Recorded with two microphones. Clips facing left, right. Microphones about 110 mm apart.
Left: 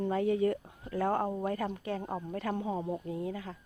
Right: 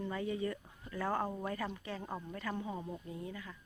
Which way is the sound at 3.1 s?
85° left.